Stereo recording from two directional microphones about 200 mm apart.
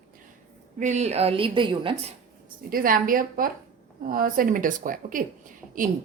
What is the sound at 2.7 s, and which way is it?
A woman's voice, 45° right (ahead or behind).